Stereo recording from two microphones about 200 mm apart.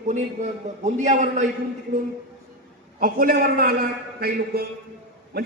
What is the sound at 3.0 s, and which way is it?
A man's voice, 45° right (ahead or behind).